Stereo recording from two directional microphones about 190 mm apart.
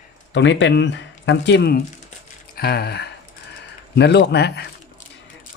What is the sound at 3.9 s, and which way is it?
Speech, 60° left (ahead or behind).